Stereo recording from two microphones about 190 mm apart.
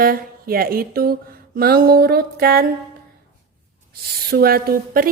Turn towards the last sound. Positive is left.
turn(degrees=-50)  # may be behind; listen again after turning